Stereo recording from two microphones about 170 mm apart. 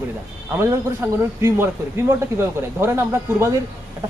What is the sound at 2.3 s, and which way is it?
Speech, 15° right (ahead or behind).